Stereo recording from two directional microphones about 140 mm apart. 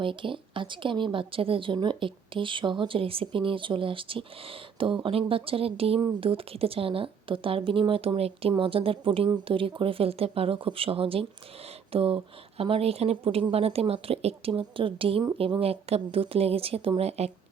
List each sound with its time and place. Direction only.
0.0 s a woman's voice: 35° right (ahead or behind)